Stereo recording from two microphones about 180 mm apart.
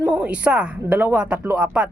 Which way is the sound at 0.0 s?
5° right (ahead or behind).